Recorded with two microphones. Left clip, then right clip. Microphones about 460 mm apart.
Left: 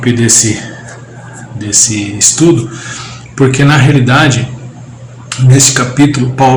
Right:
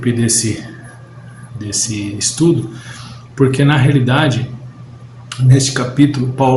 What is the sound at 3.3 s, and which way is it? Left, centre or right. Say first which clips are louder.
Speech: left 5 dB; right.